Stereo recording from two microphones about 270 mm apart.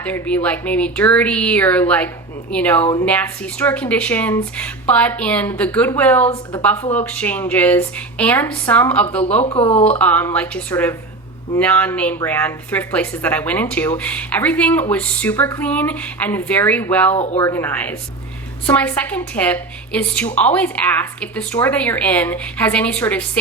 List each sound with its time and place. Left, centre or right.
0.0 s speech: centre
2.8 s a woman's voice: centre
3.1 s speech: centre
6.2 s speech: left
6.9 s speech: centre
9.4 s speech: left
10.0 s a woman's voice: centre